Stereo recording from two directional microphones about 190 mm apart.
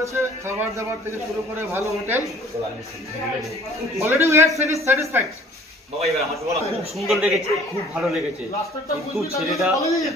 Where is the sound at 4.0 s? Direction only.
15° right (ahead or behind).